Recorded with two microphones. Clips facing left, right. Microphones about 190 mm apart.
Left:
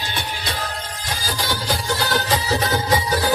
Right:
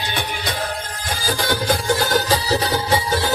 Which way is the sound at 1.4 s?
55° right (ahead or behind).